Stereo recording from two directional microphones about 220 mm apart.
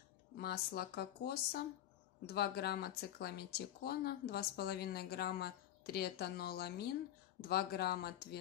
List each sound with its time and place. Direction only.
0.4 s speech: 45° left (ahead or behind)